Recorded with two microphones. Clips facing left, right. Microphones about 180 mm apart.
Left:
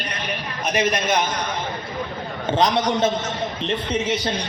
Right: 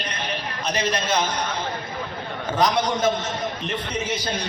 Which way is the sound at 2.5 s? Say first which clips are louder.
Left 2 dB; 20° left (ahead or behind).